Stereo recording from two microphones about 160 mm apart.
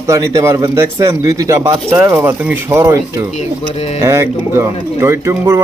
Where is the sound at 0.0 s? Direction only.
20° right (ahead or behind).